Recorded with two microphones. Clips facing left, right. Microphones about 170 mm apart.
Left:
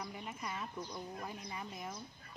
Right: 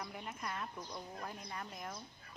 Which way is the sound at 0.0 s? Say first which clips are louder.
Left 1 dB; centre (ahead or behind).